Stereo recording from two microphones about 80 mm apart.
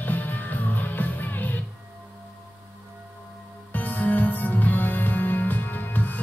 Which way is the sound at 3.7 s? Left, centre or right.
Left.